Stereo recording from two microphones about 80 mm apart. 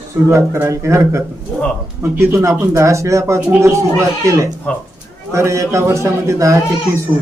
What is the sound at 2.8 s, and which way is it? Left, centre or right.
Speech, right.